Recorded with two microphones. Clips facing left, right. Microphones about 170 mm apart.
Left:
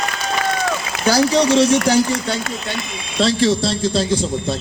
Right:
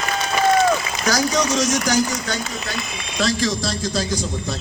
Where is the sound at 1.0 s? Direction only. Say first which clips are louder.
Left 9 dB; 30° left (ahead or behind).